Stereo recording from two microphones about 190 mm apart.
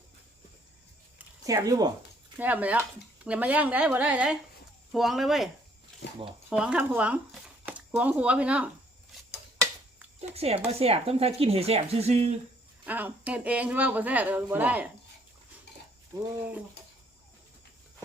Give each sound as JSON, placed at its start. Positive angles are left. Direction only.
{"t": 1.5, "sound": "speech", "side_deg": -15}
{"t": 6.0, "sound": "speech", "side_deg": 55}
{"t": 6.5, "sound": "speech", "side_deg": -5}
{"t": 10.2, "sound": "speech", "side_deg": -30}
{"t": 12.8, "sound": "speech", "side_deg": -10}